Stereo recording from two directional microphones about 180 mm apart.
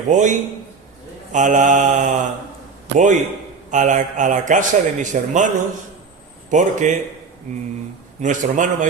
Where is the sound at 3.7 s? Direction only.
45° right (ahead or behind).